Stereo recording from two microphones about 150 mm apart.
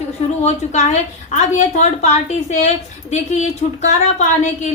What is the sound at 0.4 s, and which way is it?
A woman's voice, 50° left (ahead or behind).